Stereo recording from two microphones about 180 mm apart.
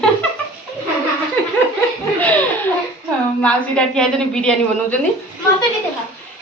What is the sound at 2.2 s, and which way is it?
Laughter, 10° left (ahead or behind).